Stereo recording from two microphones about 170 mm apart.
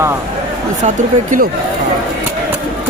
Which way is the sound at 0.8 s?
40° right (ahead or behind).